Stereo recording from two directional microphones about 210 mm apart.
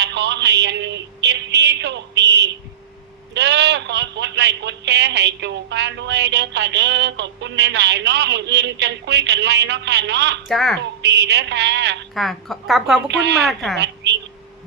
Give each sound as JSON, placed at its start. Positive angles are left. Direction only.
{"t": 0.0, "sound": "a sound", "side_deg": -55}
{"t": 3.3, "sound": "a man's voice", "side_deg": -55}
{"t": 10.5, "sound": "a woman's voice", "side_deg": 0}
{"t": 11.0, "sound": "a man's voice", "side_deg": -55}
{"t": 12.1, "sound": "a woman's voice", "side_deg": 0}
{"t": 13.1, "sound": "a man's voice", "side_deg": -55}
{"t": 13.5, "sound": "a woman's voice", "side_deg": 0}
{"t": 13.7, "sound": "a sound", "side_deg": -55}